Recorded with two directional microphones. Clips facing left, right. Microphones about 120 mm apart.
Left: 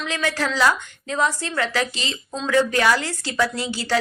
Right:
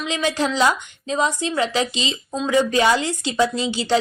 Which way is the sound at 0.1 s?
20° right (ahead or behind).